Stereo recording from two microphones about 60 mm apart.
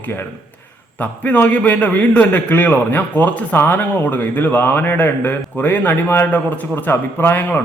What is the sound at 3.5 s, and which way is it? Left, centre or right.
A man's voice, left.